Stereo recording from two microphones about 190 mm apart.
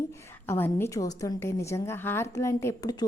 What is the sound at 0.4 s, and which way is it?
A woman's voice, 10° left (ahead or behind).